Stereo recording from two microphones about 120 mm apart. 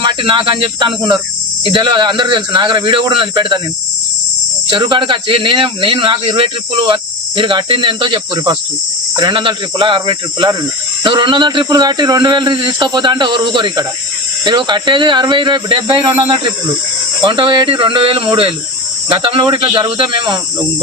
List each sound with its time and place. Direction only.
0.0 s speech: 45° right (ahead or behind)
4.7 s speech: 40° right (ahead or behind)
17.2 s speech: 45° right (ahead or behind)